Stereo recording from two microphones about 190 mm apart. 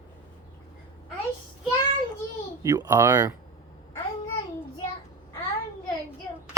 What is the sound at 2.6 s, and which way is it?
Speech, 20° right (ahead or behind).